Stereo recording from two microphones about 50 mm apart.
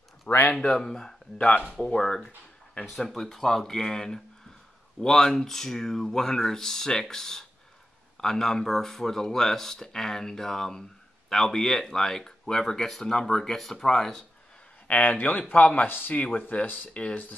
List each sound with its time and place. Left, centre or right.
0.3 s speech: left
0.6 s speech: centre
14.9 s speech: left
15.9 s speech: left
16.9 s speech: left